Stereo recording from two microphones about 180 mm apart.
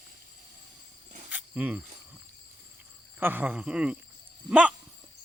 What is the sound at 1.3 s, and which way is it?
Cricket, 10° right (ahead or behind).